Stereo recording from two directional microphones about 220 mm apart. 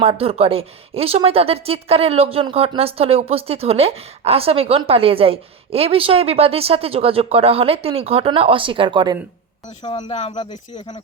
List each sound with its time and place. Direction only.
0.0 s a woman's voice: 25° right (ahead or behind)
9.8 s speech: 30° left (ahead or behind)